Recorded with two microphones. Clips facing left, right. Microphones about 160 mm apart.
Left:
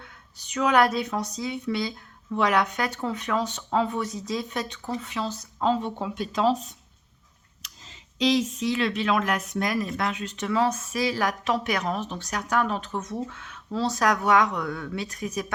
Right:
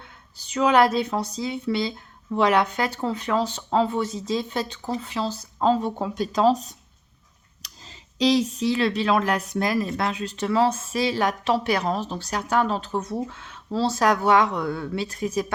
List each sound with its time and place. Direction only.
0.0 s speech: 30° right (ahead or behind)